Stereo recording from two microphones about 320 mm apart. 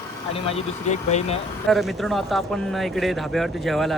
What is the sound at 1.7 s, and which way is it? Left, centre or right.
Speech, centre.